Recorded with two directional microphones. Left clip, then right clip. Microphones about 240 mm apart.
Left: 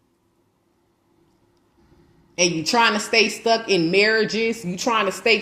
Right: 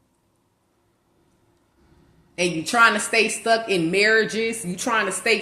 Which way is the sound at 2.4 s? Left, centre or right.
Left.